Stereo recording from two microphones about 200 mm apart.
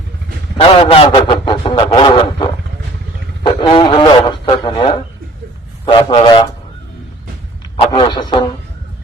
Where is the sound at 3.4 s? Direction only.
25° left (ahead or behind).